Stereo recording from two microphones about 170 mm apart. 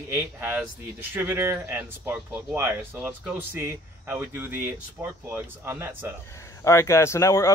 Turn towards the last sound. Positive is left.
turn(degrees=15)  # may be behind; listen again after turning